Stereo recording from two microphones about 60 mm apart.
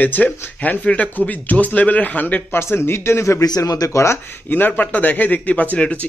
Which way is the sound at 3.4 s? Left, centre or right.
Left.